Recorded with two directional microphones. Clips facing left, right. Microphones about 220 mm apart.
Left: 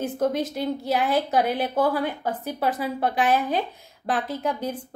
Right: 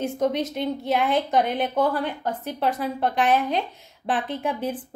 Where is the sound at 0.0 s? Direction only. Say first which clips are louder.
Even; 5° left (ahead or behind).